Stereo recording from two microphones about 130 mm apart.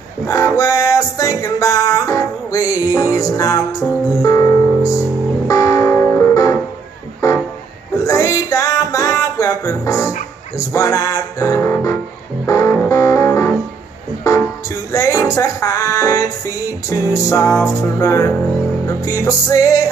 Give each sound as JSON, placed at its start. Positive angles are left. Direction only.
{"t": 0.3, "sound": "music", "side_deg": 25}
{"t": 14.9, "sound": "music", "side_deg": 25}